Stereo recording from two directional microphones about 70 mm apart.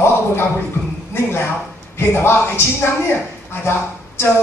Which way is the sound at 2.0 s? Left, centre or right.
Left.